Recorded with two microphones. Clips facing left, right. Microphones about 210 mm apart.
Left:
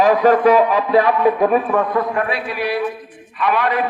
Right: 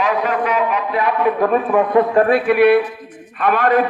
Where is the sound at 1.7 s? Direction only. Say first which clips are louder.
Right 3 dB; 10° right (ahead or behind).